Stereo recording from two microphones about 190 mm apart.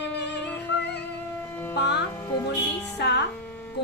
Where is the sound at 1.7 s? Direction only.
65° left (ahead or behind).